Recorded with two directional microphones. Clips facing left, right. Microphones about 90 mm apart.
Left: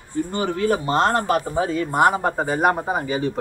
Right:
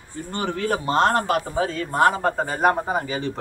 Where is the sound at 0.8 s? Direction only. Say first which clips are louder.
Even; 5° left (ahead or behind).